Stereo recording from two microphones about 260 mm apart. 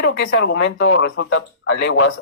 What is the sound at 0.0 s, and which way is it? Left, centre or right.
Speech, left.